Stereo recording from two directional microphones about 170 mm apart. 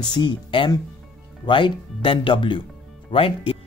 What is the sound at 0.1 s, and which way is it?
Speech, 25° left (ahead or behind).